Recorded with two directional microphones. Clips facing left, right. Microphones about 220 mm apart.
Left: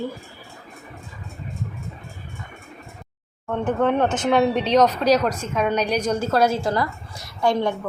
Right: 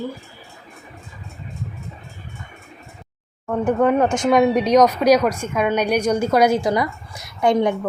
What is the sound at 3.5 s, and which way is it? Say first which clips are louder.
Speech: right 3 dB; 10° right (ahead or behind).